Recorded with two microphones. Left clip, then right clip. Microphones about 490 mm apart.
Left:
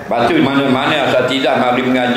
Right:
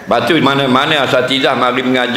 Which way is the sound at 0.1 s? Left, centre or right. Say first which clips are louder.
Right 2 dB; right.